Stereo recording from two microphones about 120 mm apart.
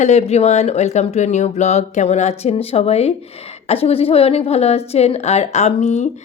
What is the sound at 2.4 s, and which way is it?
A woman's voice, 55° left (ahead or behind).